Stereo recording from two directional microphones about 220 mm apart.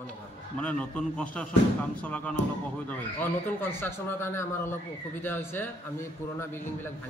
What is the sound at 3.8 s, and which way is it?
A man's voice, 10° left (ahead or behind).